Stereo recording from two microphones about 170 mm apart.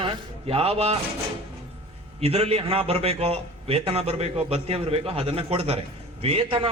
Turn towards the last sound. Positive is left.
turn(degrees=-35)  # may be behind; listen again after turning